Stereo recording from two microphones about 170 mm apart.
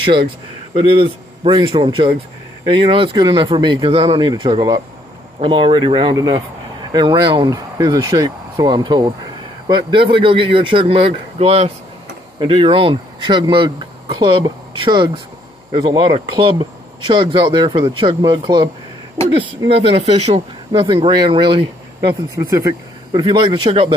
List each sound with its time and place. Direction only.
0.8 s speech: 30° right (ahead or behind)
22.4 s speech: 15° right (ahead or behind)